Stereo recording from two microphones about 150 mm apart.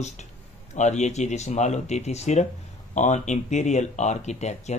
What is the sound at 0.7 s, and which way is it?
Speech, 50° left (ahead or behind).